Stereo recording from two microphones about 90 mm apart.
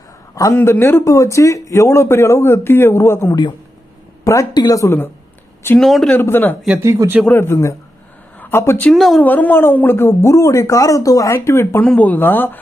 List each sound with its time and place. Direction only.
0.6 s a man's voice: 25° left (ahead or behind); by 4.9 s 40° left (ahead or behind)
5.8 s a man's voice: 5° left (ahead or behind)
6.1 s a man's voice: 25° left (ahead or behind)
6.8 s speech: 35° right (ahead or behind)
7.3 s a man's voice: 30° left (ahead or behind)
8.9 s a man's voice: centre (ahead or behind)
9.2 s speech: 20° left (ahead or behind); by 11.3 s 40° left (ahead or behind)
11.3 s a man's voice: 30° left (ahead or behind)
11.8 s a man's voice: 20° left (ahead or behind)